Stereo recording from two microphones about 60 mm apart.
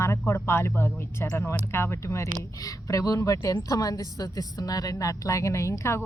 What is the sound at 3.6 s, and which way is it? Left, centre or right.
A woman's voice, left.